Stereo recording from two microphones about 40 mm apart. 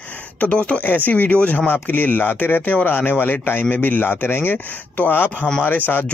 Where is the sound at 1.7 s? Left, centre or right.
Left.